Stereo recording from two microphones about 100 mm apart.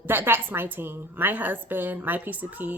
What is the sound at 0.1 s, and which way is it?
Speech, 20° right (ahead or behind).